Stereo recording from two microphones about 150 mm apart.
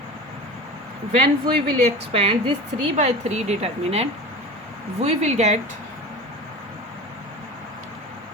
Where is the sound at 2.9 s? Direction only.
50° right (ahead or behind).